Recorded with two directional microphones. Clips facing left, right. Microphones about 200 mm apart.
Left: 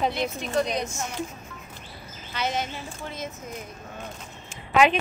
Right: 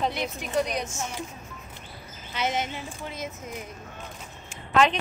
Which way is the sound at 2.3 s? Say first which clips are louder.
Even; 20° right (ahead or behind).